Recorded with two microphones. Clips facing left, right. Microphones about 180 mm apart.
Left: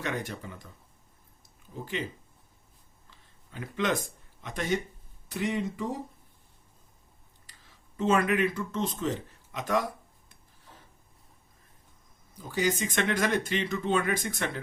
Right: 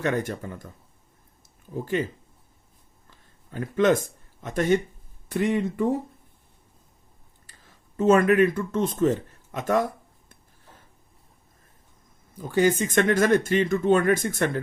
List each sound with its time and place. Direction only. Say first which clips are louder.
0.0 s speech: right 8 dB; 50° right (ahead or behind)
1.8 s speech: right 8 dB; 50° right (ahead or behind)
3.1 s a sound: right 8 dB; 50° right (ahead or behind)
5.3 s speech: right 6 dB; 55° right (ahead or behind)
7.4 s speech: right 4 dB; 50° right (ahead or behind)
12.5 s speech: right 7 dB; 55° right (ahead or behind)